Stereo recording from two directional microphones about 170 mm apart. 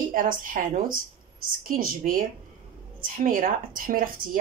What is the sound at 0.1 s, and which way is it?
Speech, 50° right (ahead or behind).